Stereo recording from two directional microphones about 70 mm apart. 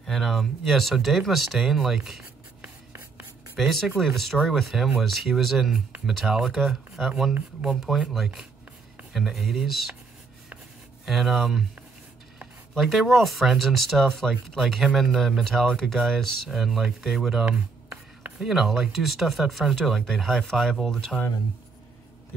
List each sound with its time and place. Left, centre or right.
0.0 s speech: centre
2.6 s writing: right
3.5 s speech: centre
11.1 s speech: centre
12.7 s speech: centre
19.7 s speech: centre